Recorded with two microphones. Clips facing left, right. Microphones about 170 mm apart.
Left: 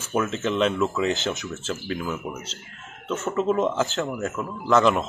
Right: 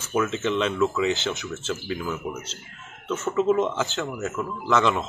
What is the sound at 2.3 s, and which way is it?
Speech, 20° left (ahead or behind).